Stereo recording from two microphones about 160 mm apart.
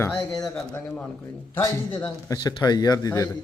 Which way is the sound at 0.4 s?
5° left (ahead or behind).